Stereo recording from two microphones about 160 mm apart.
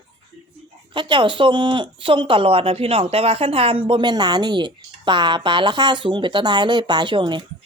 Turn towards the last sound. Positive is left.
turn(degrees=-30)  # may be behind; listen again after turning